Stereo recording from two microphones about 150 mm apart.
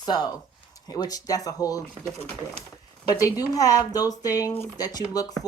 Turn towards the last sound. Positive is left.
turn(degrees=25)  # may be behind; listen again after turning